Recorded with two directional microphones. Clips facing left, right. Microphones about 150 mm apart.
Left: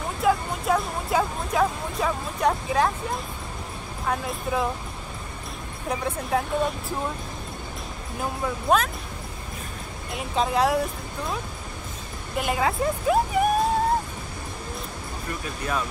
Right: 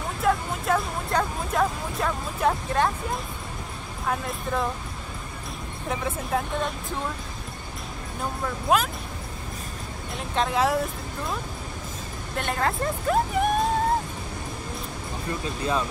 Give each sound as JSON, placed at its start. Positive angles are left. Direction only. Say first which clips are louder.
{"t": 0.2, "sound": "speech", "louder": "left 2 dB", "side_deg": 0}
{"t": 5.9, "sound": "speech", "louder": "left 2 dB", "side_deg": 0}
{"t": 8.2, "sound": "speech", "louder": "left 2 dB", "side_deg": 5}
{"t": 10.1, "sound": "speech", "louder": "left 1 dB", "side_deg": 0}
{"t": 15.4, "sound": "speech", "louder": "right 2 dB", "side_deg": -25}